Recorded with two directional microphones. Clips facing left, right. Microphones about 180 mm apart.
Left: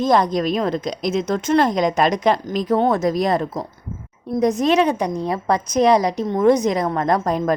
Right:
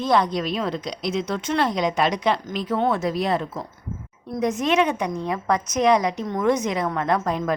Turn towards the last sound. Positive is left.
turn(degrees=40)  # may be behind; listen again after turning